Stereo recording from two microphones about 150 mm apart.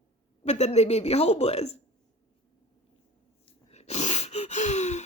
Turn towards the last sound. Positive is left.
turn(degrees=50)  # may be behind; listen again after turning